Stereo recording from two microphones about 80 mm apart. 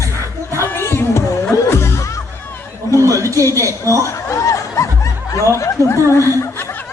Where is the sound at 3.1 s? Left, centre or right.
Right.